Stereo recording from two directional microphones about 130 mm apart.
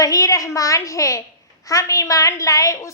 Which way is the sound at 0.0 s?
25° left (ahead or behind).